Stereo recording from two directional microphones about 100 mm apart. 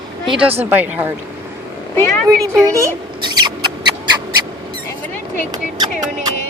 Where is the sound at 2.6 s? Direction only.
30° right (ahead or behind).